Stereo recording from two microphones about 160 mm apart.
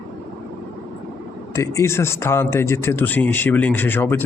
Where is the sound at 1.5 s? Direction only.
15° left (ahead or behind).